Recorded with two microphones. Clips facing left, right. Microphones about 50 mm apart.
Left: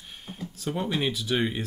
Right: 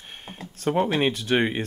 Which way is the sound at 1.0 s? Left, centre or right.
Right.